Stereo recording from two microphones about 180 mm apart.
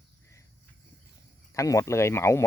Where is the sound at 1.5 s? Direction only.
15° left (ahead or behind).